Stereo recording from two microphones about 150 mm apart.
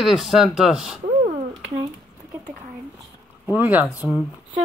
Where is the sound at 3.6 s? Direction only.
10° right (ahead or behind).